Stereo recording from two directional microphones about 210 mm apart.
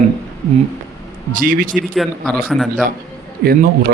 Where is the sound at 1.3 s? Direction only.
40° right (ahead or behind).